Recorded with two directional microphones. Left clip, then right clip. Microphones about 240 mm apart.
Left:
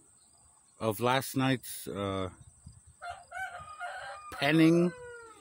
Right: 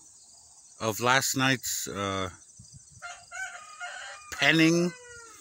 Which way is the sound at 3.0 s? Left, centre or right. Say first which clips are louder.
Right 1 dB; left.